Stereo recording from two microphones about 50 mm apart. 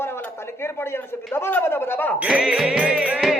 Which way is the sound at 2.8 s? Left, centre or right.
Right.